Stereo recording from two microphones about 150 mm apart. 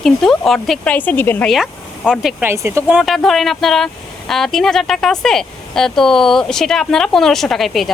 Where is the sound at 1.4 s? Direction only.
Centre (ahead or behind).